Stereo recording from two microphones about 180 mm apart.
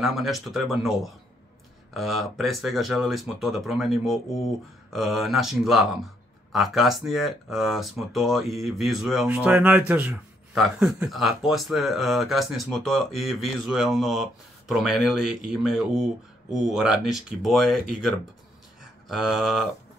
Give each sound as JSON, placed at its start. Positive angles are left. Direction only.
{"t": 0.0, "sound": "speech", "side_deg": 0}